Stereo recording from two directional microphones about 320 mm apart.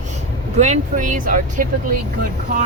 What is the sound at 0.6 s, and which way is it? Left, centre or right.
Speech, right.